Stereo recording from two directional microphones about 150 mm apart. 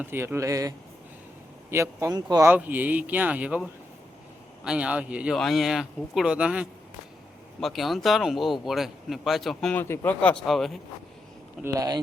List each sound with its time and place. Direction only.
0.0 s speech: 15° right (ahead or behind)
1.7 s a man's voice: 20° right (ahead or behind); by 10.8 s centre (ahead or behind)
11.6 s a man's voice: 25° right (ahead or behind)